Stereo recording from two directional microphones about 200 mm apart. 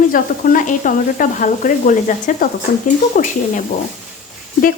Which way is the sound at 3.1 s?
45° left (ahead or behind).